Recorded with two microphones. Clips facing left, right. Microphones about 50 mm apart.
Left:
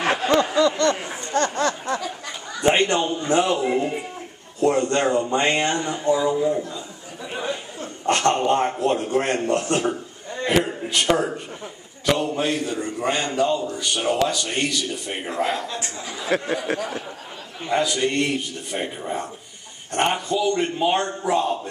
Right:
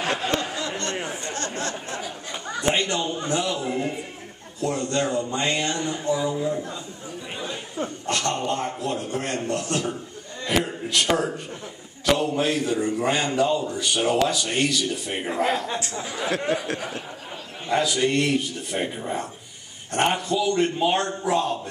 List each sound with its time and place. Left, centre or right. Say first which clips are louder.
0.3 s a sound: left 8 dB; left
2.7 s a man's voice: left 5 dB; left
5.4 s a man's voice: left 4 dB; left
6.2 s a man's voice: left 4 dB; centre
8.1 s a man's voice: left 8 dB; left
10.5 s a man's voice: left 2 dB; centre
16.3 s speech: left 6 dB; left
17.6 s a man's voice: even; centre